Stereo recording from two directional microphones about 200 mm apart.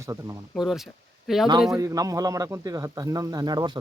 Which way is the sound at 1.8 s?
15° right (ahead or behind).